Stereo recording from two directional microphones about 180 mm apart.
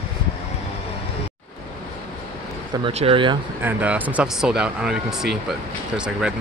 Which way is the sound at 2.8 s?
30° right (ahead or behind).